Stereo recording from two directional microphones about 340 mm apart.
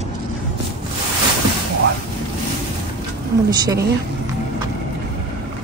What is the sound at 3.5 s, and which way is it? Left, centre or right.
Speech, centre.